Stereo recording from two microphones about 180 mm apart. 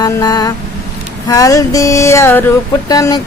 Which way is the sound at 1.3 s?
15° left (ahead or behind).